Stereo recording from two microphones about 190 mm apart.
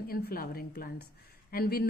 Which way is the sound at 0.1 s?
50° left (ahead or behind).